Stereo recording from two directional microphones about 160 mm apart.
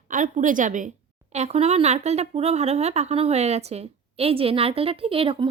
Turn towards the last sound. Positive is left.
turn(degrees=-35)  # may be behind; listen again after turning